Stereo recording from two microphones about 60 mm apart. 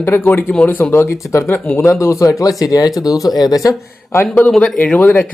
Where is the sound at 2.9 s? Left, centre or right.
Left.